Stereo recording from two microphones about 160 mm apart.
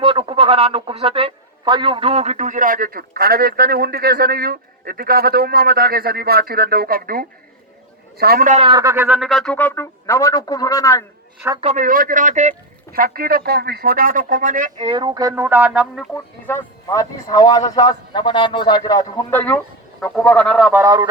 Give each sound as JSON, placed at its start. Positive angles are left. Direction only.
{"t": 0.0, "sound": "a man's voice", "side_deg": -35}
{"t": 8.4, "sound": "a man's voice", "side_deg": -40}
{"t": 8.7, "sound": "speech", "side_deg": -20}
{"t": 11.6, "sound": "speech", "side_deg": -50}
{"t": 12.9, "sound": "speech", "side_deg": -65}
{"t": 14.8, "sound": "speech", "side_deg": -30}
{"t": 16.8, "sound": "speech", "side_deg": 20}
{"t": 20.8, "sound": "speech", "side_deg": -20}